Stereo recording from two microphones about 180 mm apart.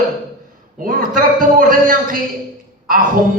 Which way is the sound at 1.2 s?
50° right (ahead or behind).